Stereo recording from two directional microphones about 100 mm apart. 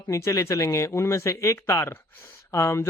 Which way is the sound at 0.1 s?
30° left (ahead or behind).